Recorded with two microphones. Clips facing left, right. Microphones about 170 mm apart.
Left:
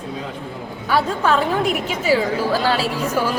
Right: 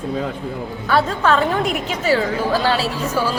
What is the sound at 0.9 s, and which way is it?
A woman's voice, 10° left (ahead or behind).